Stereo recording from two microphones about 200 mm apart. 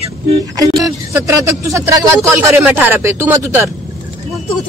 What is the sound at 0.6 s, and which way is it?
A woman's voice, 15° right (ahead or behind).